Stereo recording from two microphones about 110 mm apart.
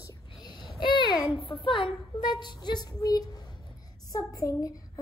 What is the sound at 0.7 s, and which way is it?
Speech, 45° left (ahead or behind).